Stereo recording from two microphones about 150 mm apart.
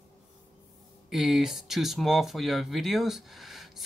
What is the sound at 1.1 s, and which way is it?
Speech, centre (ahead or behind).